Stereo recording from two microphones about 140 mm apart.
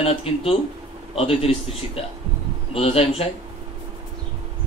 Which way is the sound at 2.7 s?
45° left (ahead or behind).